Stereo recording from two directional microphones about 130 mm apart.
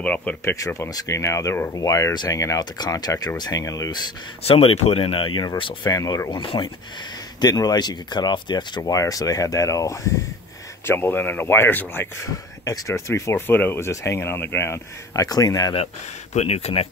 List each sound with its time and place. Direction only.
0.0 s speech: 10° left (ahead or behind)
0.9 s speech: 25° left (ahead or behind)
4.4 s speech: 50° left (ahead or behind); by 6.4 s 30° left (ahead or behind)
6.4 s speech: 40° left (ahead or behind)
7.3 s speech: 30° left (ahead or behind)
16.3 s speech: 55° left (ahead or behind)